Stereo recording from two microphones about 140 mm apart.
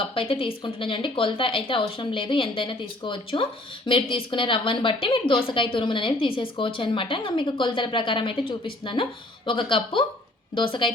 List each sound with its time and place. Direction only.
0.1 s a woman's voice: 40° left (ahead or behind)